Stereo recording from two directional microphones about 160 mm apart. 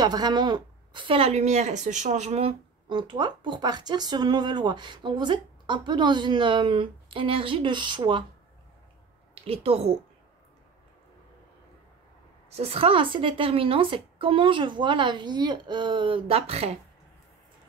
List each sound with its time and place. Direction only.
0.0 s a woman's voice: 25° right (ahead or behind); by 2.5 s 45° right (ahead or behind)
2.9 s speech: 30° right (ahead or behind)
9.3 s a woman's voice: 40° right (ahead or behind)
12.4 s a woman's voice: 40° right (ahead or behind)